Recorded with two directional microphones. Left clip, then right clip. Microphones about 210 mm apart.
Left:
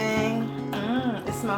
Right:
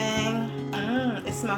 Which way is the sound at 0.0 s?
5° right (ahead or behind).